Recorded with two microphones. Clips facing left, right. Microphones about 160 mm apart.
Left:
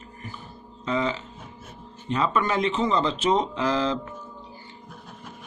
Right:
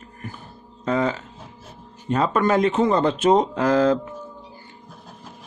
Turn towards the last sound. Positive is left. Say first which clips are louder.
# right 6 dB
turn(degrees=-50)  # may be behind; listen again after turning